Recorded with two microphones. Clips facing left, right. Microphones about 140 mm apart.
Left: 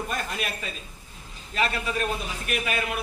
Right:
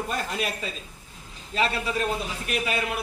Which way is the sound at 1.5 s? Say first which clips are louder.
Right 1 dB; 25° right (ahead or behind).